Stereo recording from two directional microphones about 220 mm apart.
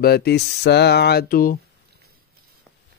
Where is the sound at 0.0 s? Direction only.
45° left (ahead or behind).